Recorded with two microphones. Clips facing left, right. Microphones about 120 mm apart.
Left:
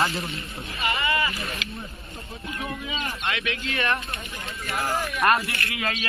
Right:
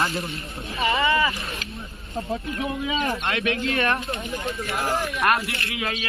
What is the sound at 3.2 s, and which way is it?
Speech, 35° right (ahead or behind).